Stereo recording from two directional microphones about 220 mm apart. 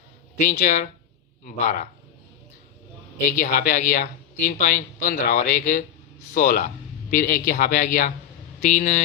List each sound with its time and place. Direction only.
0.3 s speech: 35° left (ahead or behind)
3.2 s speech: 35° left (ahead or behind)